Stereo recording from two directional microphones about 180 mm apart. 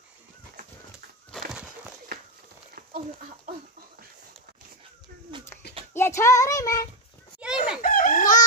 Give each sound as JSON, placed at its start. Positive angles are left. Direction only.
{"t": 5.9, "sound": "a child's voice", "side_deg": 15}
{"t": 7.3, "sound": "chicken", "side_deg": -5}
{"t": 7.8, "sound": "chicken", "side_deg": 50}